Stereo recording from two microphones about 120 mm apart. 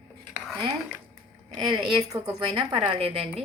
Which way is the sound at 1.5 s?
40° right (ahead or behind).